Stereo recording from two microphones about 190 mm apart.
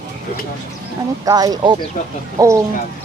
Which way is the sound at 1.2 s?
20° right (ahead or behind).